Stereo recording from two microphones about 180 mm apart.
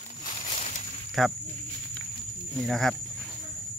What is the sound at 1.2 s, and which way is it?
Speech, centre (ahead or behind).